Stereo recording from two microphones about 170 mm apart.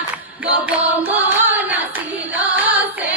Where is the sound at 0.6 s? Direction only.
10° right (ahead or behind).